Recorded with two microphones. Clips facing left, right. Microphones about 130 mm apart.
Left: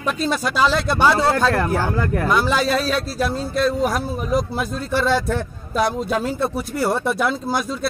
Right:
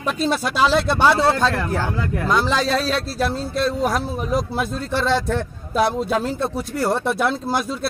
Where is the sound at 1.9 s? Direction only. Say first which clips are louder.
Left 3 dB; 55° left (ahead or behind).